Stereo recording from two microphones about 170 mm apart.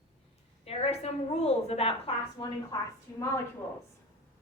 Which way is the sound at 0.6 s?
35° left (ahead or behind).